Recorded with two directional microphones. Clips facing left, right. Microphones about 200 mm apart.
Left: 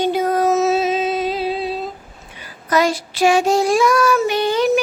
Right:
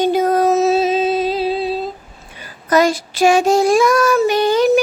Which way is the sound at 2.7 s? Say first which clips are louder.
Right 3 dB; 45° right (ahead or behind).